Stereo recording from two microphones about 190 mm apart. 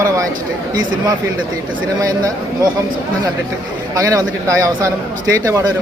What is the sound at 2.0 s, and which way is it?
Speech, 20° right (ahead or behind).